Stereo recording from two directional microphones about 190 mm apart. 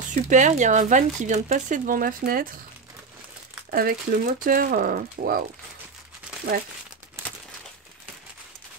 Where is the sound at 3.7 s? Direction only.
50° right (ahead or behind).